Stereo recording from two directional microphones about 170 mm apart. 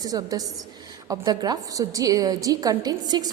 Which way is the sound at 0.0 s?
20° right (ahead or behind).